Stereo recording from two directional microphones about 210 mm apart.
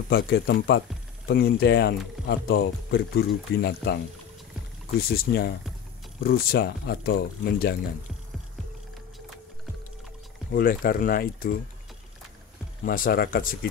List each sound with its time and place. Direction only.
0.1 s speech: 50° left (ahead or behind)
5.1 s speech: 45° left (ahead or behind)
10.5 s speech: 45° left (ahead or behind)
12.8 s speech: 45° left (ahead or behind)